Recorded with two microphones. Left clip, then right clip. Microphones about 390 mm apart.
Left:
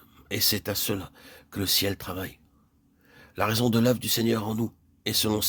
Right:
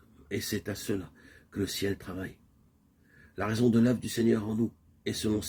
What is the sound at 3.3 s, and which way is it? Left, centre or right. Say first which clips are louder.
Speech: left 3 dB; left.